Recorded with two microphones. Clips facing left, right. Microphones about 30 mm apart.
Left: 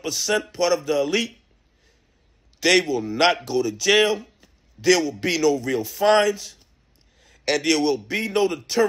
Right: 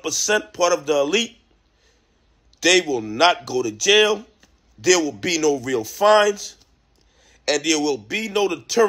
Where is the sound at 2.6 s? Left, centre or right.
Centre.